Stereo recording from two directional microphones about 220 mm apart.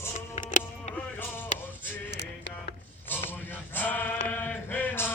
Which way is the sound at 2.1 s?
50° left (ahead or behind).